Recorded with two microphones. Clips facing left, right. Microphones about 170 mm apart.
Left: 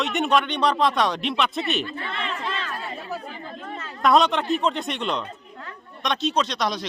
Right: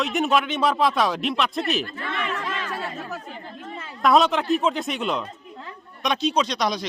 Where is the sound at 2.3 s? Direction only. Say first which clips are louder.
Right 1 dB; 85° right.